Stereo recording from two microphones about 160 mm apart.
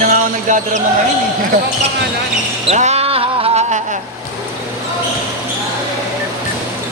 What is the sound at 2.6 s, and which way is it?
Music, 45° right (ahead or behind).